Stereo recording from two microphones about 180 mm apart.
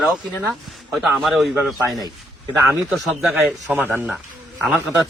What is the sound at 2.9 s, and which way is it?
A man's voice, 5° right (ahead or behind).